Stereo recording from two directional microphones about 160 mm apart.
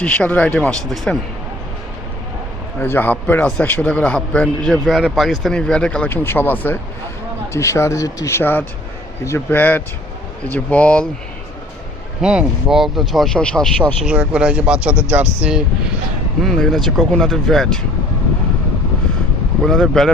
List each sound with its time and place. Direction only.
0.0 s a man's voice: 10° left (ahead or behind)
2.8 s a man's voice: 15° left (ahead or behind)
12.2 s speech: 5° right (ahead or behind)
14.0 s speech: 5° right (ahead or behind)
19.6 s speech: centre (ahead or behind)